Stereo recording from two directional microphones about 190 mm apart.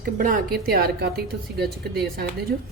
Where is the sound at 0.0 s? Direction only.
45° right (ahead or behind).